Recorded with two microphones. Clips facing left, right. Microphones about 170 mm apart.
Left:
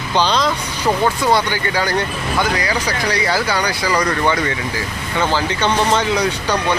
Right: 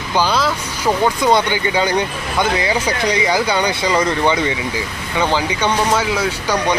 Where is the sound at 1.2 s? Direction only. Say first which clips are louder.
Right 2 dB; 20° right (ahead or behind).